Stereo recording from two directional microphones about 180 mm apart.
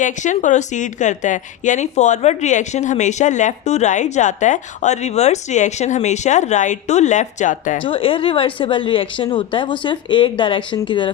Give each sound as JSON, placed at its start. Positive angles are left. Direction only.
{"t": 0.0, "sound": "a woman's voice", "side_deg": 45}
{"t": 7.9, "sound": "a woman's voice", "side_deg": 30}